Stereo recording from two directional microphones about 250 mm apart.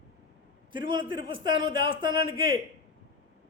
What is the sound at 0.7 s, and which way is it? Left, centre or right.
A man's voice, centre.